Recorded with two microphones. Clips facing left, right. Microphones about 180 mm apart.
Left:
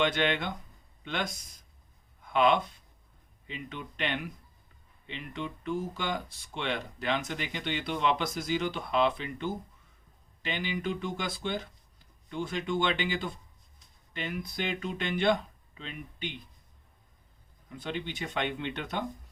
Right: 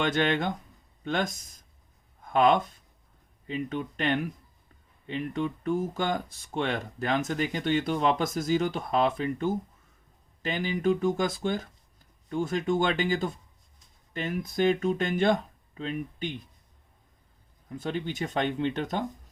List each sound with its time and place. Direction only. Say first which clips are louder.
0.0 s speech: right 2 dB; 45° right (ahead or behind)
17.7 s speech: right 4 dB; 40° right (ahead or behind)